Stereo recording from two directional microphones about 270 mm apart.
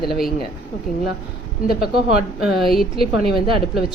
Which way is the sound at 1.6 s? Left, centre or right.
Left.